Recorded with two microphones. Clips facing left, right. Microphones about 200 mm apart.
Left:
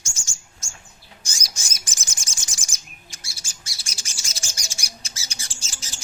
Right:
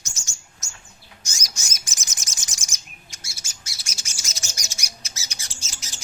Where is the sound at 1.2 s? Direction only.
30° left (ahead or behind).